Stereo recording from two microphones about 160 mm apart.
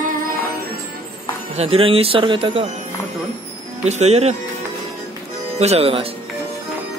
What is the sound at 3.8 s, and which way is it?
Speech, 45° right (ahead or behind).